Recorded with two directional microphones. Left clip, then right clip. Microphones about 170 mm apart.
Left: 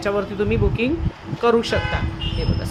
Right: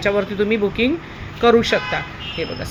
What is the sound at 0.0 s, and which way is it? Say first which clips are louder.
Speech: right 3 dB; 5° right (ahead or behind).